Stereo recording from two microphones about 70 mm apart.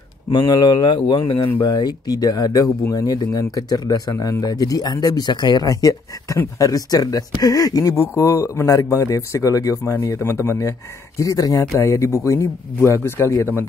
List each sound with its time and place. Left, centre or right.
0.3 s speech: left
3.1 s speech: left
10.0 s a man's voice: left
11.1 s a man's voice: left